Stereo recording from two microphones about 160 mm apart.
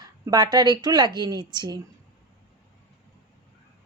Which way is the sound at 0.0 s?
25° right (ahead or behind).